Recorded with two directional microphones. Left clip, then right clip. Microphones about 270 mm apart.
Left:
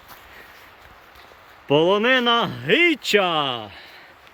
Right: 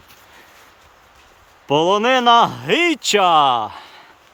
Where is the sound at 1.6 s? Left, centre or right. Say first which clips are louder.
Right 2 dB; centre.